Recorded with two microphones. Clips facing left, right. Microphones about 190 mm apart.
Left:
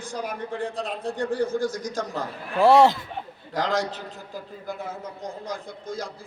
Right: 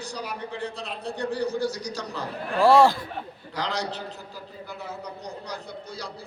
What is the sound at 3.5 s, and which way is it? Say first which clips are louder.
A man's voice: left 4 dB; 45° left (ahead or behind).